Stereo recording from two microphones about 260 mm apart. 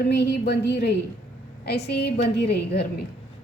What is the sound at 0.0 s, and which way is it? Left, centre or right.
A woman's voice, left.